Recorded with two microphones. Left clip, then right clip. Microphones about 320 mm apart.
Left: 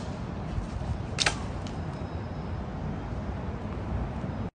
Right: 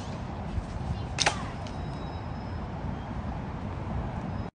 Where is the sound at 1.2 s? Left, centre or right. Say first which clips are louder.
Right 1 dB; centre.